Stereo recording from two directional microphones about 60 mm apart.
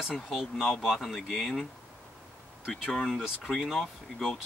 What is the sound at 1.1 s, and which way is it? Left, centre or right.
Speech, centre.